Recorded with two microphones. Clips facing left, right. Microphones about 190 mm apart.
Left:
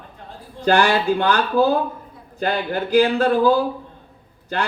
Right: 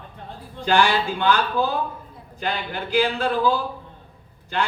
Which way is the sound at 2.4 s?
45° left (ahead or behind).